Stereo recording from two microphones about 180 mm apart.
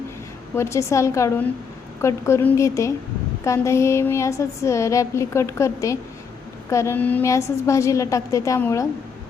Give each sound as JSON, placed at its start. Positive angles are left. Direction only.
{"t": 0.5, "sound": "a woman's voice", "side_deg": 15}